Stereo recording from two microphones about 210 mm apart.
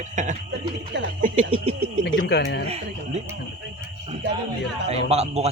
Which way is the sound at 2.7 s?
30° right (ahead or behind).